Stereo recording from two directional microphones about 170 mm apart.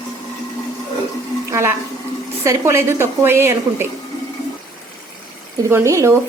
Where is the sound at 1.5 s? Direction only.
15° right (ahead or behind).